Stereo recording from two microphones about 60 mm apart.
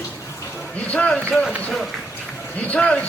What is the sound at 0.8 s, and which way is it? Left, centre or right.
Speech, left.